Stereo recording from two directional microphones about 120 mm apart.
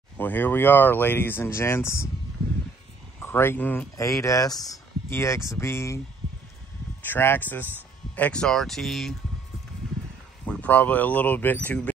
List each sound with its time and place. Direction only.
0.2 s speech: 15° left (ahead or behind)
3.2 s speech: 20° left (ahead or behind)
3.9 s speech: 25° left (ahead or behind)
7.0 s speech: 15° left (ahead or behind); by 9.1 s centre (ahead or behind)
10.4 s speech: 10° left (ahead or behind)